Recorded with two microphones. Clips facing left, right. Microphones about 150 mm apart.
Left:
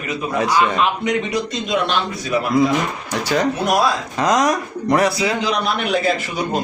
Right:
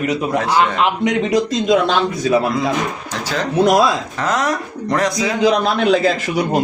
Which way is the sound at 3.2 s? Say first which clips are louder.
Right 3 dB; 10° left (ahead or behind).